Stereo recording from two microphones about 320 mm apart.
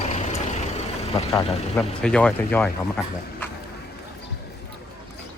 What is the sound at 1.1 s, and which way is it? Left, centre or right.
Speech, centre.